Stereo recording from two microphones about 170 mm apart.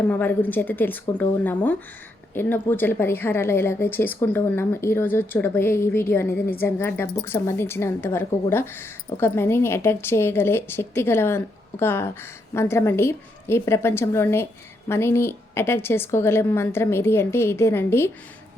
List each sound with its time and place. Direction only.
0.0 s a woman's voice: 10° left (ahead or behind)